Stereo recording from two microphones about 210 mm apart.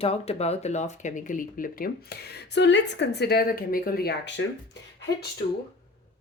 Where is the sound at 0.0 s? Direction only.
30° left (ahead or behind); by 5.3 s 55° left (ahead or behind).